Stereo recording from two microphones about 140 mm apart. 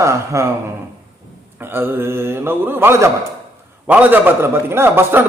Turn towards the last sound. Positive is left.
turn(degrees=-15)  # may be behind; listen again after turning